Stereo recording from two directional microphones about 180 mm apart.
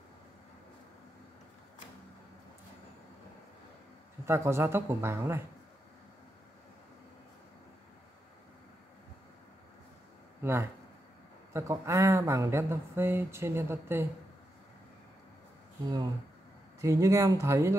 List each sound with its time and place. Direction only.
4.3 s speech: 15° right (ahead or behind)
10.4 s speech: 15° right (ahead or behind)
16.8 s speech: 15° right (ahead or behind)